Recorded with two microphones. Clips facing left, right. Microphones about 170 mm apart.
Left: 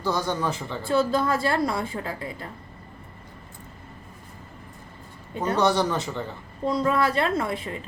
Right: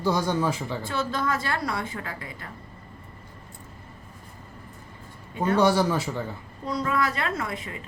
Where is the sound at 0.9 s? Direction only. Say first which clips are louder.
Left 7 dB; 30° left (ahead or behind).